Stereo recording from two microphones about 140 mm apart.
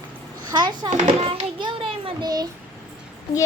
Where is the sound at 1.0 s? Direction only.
40° right (ahead or behind).